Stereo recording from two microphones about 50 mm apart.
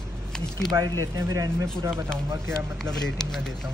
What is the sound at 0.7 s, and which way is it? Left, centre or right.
Speech, right.